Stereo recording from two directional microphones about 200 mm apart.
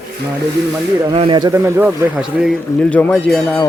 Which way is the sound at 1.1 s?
25° right (ahead or behind).